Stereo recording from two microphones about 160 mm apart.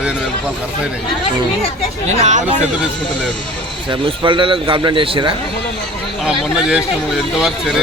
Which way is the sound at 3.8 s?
30° right (ahead or behind).